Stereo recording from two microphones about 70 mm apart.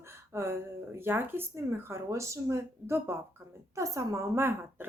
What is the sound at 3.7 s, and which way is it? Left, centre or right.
Speech, right.